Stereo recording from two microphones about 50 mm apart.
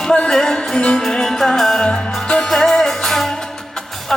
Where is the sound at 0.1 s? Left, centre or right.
Centre.